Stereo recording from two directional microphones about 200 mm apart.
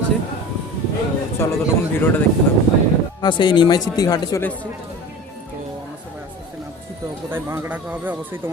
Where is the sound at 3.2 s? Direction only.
25° left (ahead or behind).